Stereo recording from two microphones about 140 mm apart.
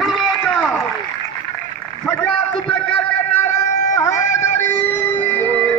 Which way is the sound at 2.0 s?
15° left (ahead or behind).